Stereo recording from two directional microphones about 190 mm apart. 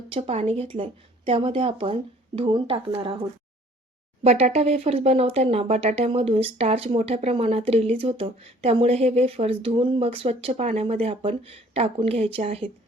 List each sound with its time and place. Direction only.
0.1 s a woman's voice: 30° right (ahead or behind)